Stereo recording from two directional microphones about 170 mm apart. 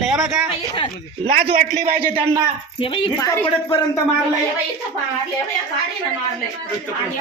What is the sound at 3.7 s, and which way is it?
Speech, 30° left (ahead or behind).